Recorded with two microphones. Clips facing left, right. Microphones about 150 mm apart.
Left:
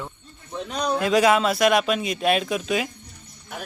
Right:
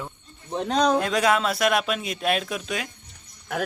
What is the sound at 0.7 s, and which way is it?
Speech, 90° right.